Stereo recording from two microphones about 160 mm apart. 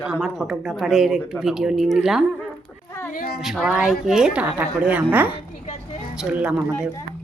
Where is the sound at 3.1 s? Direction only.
70° left (ahead or behind).